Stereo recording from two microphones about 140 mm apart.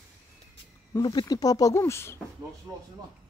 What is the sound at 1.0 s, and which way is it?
Speech, 30° left (ahead or behind).